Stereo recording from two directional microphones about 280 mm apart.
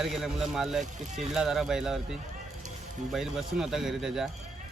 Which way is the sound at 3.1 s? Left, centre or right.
Centre.